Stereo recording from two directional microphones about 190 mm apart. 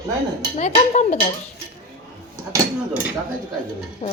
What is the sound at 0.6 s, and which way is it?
Speech, 35° left (ahead or behind).